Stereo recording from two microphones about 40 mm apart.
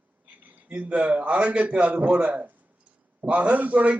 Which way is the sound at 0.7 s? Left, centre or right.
Right.